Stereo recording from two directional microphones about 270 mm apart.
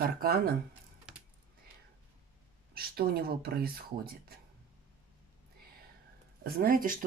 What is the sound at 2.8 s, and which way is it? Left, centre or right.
Speech, right.